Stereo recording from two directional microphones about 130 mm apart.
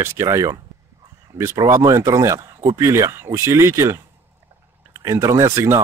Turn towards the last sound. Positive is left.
turn(degrees=-25)  # may be behind; listen again after turning